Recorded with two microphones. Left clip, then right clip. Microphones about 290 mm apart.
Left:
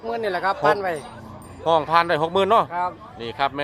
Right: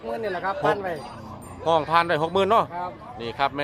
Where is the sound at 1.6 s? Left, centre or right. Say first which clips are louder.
Left 2 dB; centre.